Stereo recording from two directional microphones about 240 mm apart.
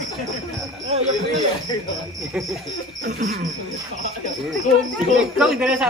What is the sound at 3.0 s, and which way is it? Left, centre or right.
Cricket, right.